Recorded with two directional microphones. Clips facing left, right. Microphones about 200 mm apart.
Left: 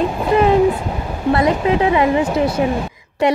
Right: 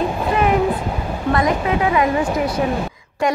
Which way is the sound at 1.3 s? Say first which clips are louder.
Left 3 dB; 30° left (ahead or behind).